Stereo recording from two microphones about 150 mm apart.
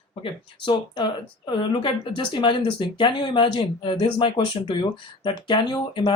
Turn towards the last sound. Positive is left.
turn(degrees=30)  # may be behind; listen again after turning